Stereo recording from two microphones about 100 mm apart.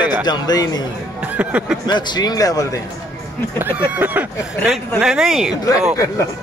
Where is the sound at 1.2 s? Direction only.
15° right (ahead or behind).